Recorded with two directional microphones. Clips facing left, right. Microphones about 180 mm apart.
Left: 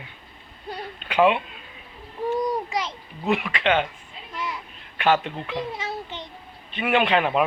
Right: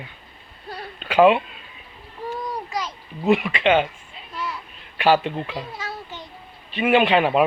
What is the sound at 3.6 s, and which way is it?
Speech, 5° right (ahead or behind).